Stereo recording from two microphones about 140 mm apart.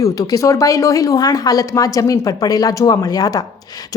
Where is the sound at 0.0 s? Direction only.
25° left (ahead or behind).